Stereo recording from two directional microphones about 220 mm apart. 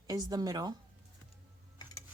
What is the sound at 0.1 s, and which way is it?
Speech, 20° right (ahead or behind).